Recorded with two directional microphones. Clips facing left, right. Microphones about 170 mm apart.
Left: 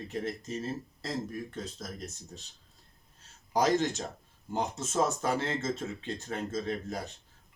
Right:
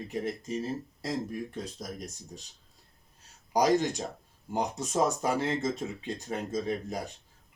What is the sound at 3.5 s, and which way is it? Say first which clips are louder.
Speech: right 2 dB; 15° right (ahead or behind).